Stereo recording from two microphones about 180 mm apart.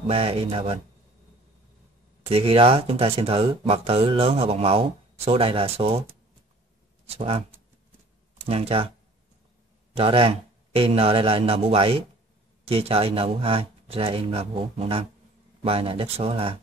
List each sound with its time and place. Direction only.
0.0 s speech: 30° right (ahead or behind)
2.2 s speech: 30° right (ahead or behind)
7.1 s speech: 35° right (ahead or behind)
8.5 s speech: 35° right (ahead or behind)
9.9 s speech: 30° right (ahead or behind)